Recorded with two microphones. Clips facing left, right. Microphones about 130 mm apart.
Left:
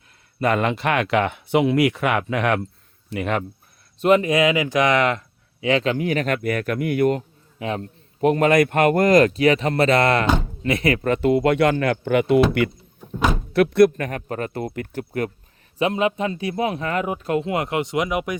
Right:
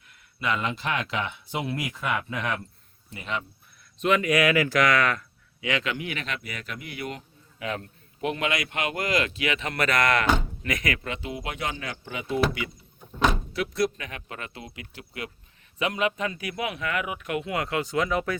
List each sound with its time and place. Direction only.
0.3 s speech: 50° left (ahead or behind)
4.0 s speech: 30° left (ahead or behind); by 7.3 s 45° left (ahead or behind)
7.6 s speech: 30° left (ahead or behind)
11.0 s speech: 55° left (ahead or behind)
13.5 s speech: 60° left (ahead or behind)
15.8 s speech: 30° left (ahead or behind)